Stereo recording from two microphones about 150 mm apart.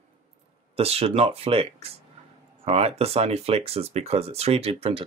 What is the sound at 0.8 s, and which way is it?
Speech, 40° right (ahead or behind).